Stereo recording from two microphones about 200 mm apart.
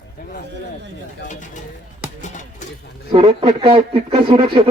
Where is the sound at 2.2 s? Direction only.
40° left (ahead or behind).